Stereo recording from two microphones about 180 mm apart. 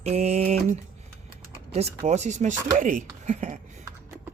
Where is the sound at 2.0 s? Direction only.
40° right (ahead or behind).